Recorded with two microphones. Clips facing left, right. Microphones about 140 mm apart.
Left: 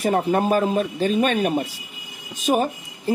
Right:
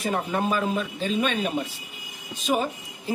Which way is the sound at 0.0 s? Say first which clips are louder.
Left 6 dB; 45° left (ahead or behind).